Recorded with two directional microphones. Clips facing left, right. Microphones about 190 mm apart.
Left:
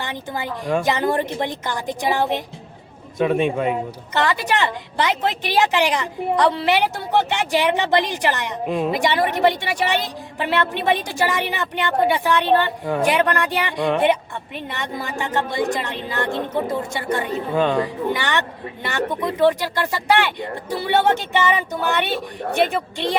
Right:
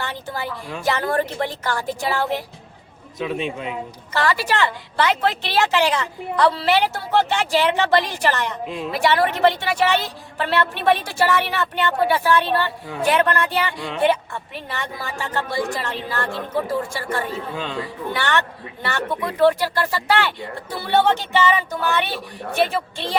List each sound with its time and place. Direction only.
0.0 s speech: 15° left (ahead or behind)
3.2 s a man's voice: 50° left (ahead or behind)
4.1 s speech: 20° left (ahead or behind)
8.6 s a man's voice: 50° left (ahead or behind)
8.9 s a woman's voice: 15° left (ahead or behind)
17.6 s a man's voice: 50° left (ahead or behind)
18.1 s speech: 15° left (ahead or behind)